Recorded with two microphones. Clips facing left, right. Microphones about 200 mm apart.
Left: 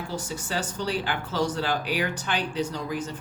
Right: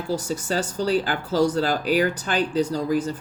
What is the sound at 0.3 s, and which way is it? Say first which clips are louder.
Speech: right 6 dB; 40° right (ahead or behind).